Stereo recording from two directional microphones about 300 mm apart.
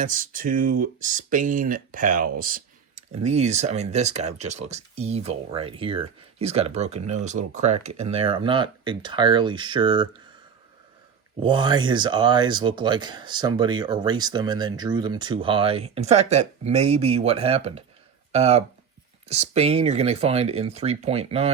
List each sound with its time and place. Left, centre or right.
0.0 s speech: right
11.3 s speech: centre